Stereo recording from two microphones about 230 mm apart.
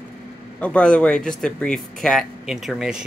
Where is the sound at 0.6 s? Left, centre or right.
Centre.